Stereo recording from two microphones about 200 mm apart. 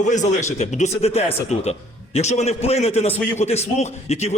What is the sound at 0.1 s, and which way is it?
A man's voice, 35° left (ahead or behind).